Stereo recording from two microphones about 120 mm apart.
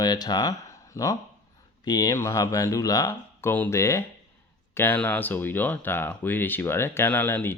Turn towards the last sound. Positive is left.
turn(degrees=15)  # may be behind; listen again after turning